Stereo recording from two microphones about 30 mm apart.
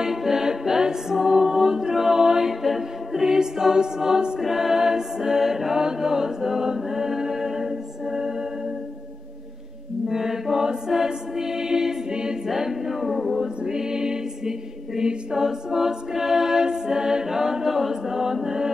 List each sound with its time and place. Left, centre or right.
0.0 s a capella: centre
3.3 s music: centre
4.5 s a capella: centre
5.8 s chant: right
10.0 s chant: centre
10.7 s choir: right
12.1 s a capella: right
12.4 s a capella: centre
13.0 s a sound: centre
13.7 s music: centre
15.0 s a capella: right